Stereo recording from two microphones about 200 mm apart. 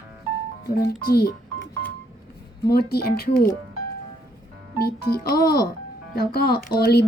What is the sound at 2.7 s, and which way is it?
Speech, 50° left (ahead or behind).